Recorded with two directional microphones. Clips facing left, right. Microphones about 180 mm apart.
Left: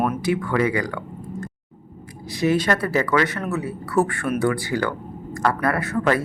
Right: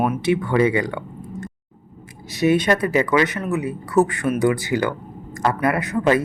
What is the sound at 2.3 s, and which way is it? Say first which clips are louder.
Speech: right 3 dB; 20° right (ahead or behind).